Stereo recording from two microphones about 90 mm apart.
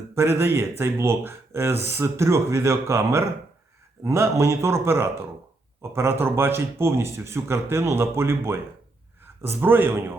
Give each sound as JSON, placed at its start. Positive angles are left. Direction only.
{"t": 0.1, "sound": "a man's voice", "side_deg": -30}